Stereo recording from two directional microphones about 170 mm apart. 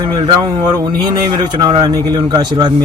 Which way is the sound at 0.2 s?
25° right (ahead or behind).